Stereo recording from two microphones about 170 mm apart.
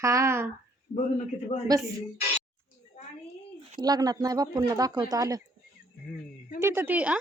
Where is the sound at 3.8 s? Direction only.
25° right (ahead or behind).